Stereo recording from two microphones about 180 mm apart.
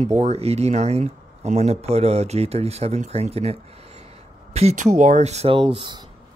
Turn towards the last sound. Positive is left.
turn(degrees=-25)  # may be behind; listen again after turning